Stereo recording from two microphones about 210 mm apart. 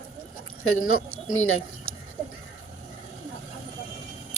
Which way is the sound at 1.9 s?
85° left.